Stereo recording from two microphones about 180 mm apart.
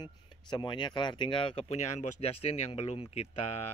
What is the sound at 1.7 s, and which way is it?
Speech, 40° left (ahead or behind).